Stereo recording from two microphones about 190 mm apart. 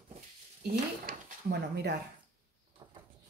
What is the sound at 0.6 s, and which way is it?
Speech, 50° right (ahead or behind).